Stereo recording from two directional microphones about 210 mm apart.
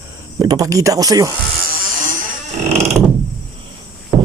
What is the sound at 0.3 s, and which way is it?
Speech, 15° right (ahead or behind).